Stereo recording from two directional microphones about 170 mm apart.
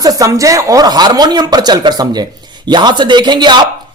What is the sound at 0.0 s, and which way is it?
Speech, 20° right (ahead or behind).